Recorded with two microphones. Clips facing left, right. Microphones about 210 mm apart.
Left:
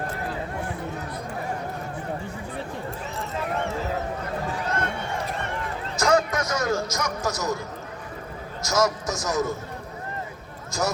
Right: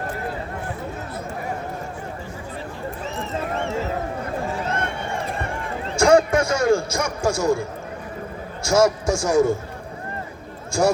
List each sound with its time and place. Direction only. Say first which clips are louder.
6.0 s a sound: right 7 dB; 30° right (ahead or behind)
8.6 s a man's voice: right 6 dB; 30° right (ahead or behind)
10.7 s speech: right 8 dB; 30° right (ahead or behind)